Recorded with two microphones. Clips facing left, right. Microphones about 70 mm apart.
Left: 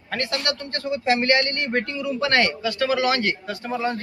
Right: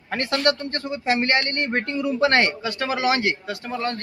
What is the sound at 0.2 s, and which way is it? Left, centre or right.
A man's voice, right.